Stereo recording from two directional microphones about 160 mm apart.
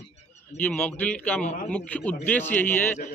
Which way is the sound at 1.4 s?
50° left (ahead or behind).